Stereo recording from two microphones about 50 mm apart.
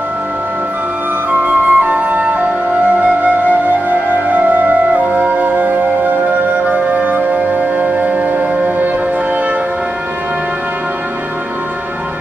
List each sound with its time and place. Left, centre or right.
1.4 s flute: right
4.6 s music: right